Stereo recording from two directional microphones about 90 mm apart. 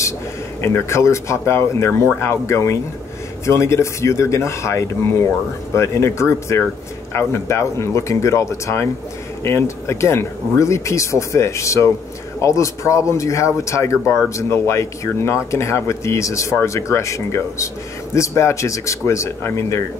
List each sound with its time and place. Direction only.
0.6 s speech: 30° left (ahead or behind)